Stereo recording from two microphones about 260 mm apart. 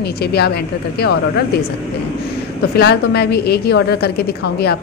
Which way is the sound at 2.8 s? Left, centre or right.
Left.